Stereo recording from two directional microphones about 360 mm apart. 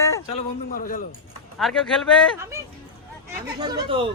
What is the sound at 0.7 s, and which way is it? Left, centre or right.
Speech, left.